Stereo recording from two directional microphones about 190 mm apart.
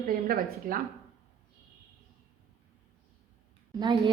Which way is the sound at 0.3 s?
50° right (ahead or behind).